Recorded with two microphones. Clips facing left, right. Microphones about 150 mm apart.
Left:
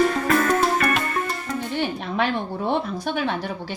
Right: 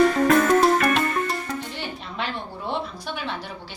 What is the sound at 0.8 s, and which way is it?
Music, centre (ahead or behind).